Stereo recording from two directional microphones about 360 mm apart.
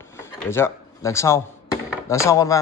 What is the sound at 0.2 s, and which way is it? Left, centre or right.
Drawer open or close, centre.